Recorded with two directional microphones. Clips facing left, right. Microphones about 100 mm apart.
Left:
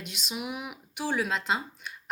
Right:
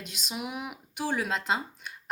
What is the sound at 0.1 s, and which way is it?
Speech, 40° right (ahead or behind).